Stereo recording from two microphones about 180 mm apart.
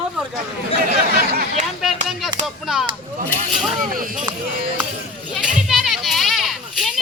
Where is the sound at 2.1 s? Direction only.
Centre (ahead or behind).